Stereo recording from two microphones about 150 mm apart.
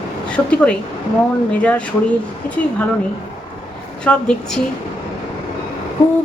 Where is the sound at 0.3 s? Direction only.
5° left (ahead or behind).